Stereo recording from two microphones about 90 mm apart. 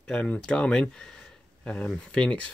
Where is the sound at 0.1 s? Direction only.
15° left (ahead or behind).